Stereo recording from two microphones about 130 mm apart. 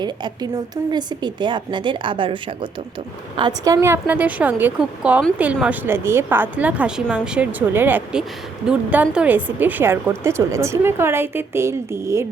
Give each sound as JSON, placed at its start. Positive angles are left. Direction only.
{"t": 0.0, "sound": "a woman's voice", "side_deg": -35}
{"t": 3.7, "sound": "a woman's voice", "side_deg": -20}